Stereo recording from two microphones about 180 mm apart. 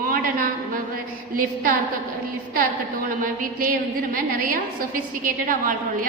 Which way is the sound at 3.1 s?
50° right (ahead or behind).